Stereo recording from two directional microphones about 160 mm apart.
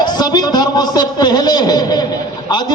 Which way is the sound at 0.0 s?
25° left (ahead or behind).